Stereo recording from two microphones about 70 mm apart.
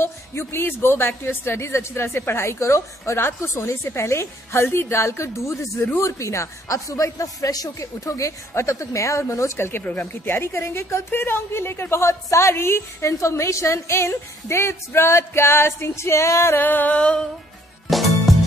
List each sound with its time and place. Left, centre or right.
0.0 s a woman's voice: left
9.6 s a woman's voice: left
9.8 s a sound: left
10.3 s a woman's voice: left
16.5 s a sound: left
17.8 s music: centre